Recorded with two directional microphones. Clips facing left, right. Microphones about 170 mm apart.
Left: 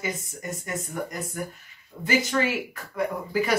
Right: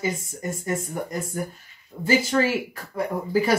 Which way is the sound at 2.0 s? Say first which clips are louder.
Right 3 dB; 30° right (ahead or behind).